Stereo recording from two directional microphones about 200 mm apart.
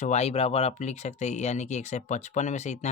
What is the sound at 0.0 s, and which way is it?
Speech, 35° left (ahead or behind).